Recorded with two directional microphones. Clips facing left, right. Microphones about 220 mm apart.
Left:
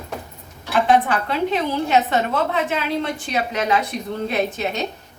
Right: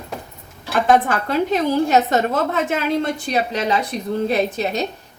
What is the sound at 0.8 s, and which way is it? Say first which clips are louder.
A woman's voice: right 2 dB; 45° right (ahead or behind).